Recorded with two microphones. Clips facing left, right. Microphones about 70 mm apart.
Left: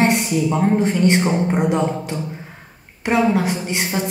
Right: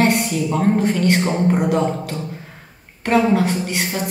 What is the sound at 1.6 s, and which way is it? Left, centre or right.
Speech, centre.